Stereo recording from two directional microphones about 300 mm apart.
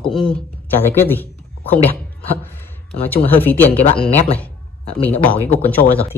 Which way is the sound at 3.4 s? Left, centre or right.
Centre.